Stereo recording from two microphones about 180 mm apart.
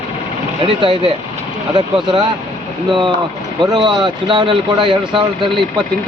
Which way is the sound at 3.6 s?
25° right (ahead or behind).